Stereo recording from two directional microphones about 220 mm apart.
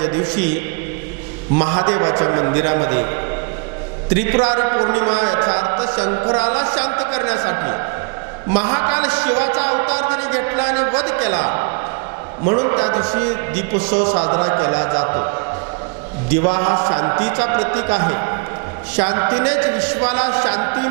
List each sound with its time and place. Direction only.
1.5 s a man's voice: 25° right (ahead or behind)
4.4 s a man's voice: 25° right (ahead or behind)
11.3 s a man's voice: 25° right (ahead or behind)
13.9 s a man's voice: 25° right (ahead or behind)
16.4 s a man's voice: 25° right (ahead or behind)